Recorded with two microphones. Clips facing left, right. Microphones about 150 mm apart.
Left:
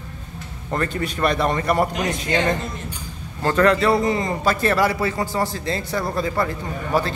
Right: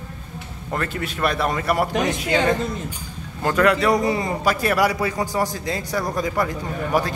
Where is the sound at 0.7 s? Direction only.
Centre (ahead or behind).